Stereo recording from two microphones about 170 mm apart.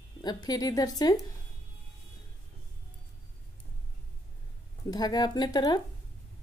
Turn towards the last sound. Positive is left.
turn(degrees=25)  # may be behind; listen again after turning